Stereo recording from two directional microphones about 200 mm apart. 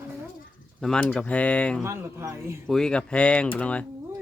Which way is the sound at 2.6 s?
5° left (ahead or behind).